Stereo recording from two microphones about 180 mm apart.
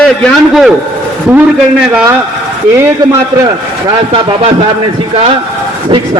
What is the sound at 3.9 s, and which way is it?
Speech, 30° right (ahead or behind).